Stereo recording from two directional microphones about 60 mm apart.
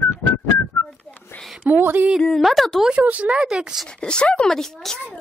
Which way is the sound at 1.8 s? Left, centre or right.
Right.